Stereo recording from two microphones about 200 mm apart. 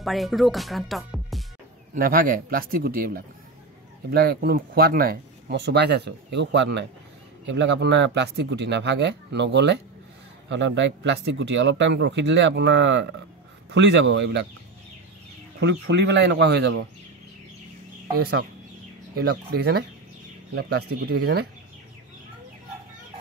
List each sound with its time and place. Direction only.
0.0 s speech: centre (ahead or behind)
2.0 s a man's voice: 45° right (ahead or behind); by 14.4 s 65° right (ahead or behind)
15.6 s speech: 60° right (ahead or behind)
18.1 s a man's voice: 50° right (ahead or behind)